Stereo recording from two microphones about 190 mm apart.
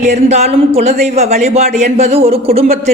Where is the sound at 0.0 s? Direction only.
35° right (ahead or behind).